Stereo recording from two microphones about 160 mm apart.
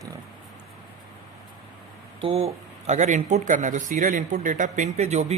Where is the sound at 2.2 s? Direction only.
35° right (ahead or behind).